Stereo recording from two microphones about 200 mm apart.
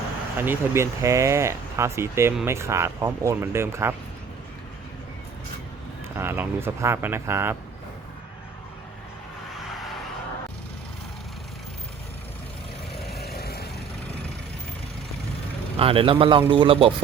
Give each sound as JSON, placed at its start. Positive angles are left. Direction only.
{"t": 0.3, "sound": "speech", "side_deg": -10}
{"t": 6.1, "sound": "speech", "side_deg": -10}
{"t": 13.1, "sound": "vehicle", "side_deg": 50}
{"t": 15.8, "sound": "speech", "side_deg": -25}